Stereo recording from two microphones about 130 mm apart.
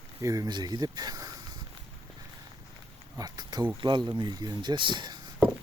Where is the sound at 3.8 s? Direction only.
35° right (ahead or behind).